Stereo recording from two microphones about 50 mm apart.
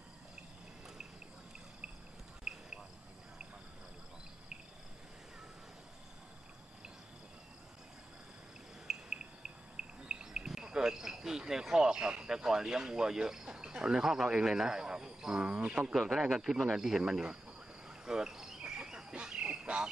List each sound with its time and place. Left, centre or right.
2.5 s a sound: centre
8.8 s cricket: centre
14.3 s speech: centre
15.9 s speech: centre
17.8 s cricket: centre